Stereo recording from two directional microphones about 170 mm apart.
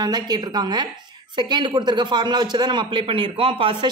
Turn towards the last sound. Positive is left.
turn(degrees=-30)  # may be behind; listen again after turning